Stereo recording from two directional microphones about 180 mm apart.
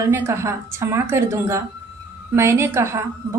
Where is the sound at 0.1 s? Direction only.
15° right (ahead or behind).